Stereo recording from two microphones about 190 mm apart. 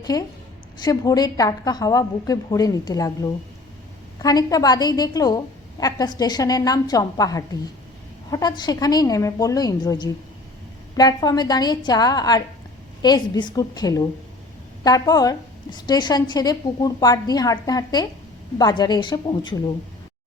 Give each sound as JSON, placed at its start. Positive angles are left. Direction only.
{"t": 0.0, "sound": "a woman's voice", "side_deg": 20}